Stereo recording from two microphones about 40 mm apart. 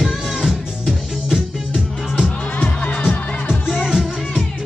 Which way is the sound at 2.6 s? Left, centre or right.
Left.